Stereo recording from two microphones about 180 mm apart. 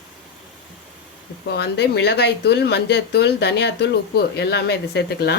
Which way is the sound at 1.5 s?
65° left (ahead or behind).